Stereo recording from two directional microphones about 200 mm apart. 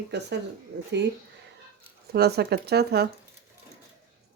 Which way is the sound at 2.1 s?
50° right (ahead or behind).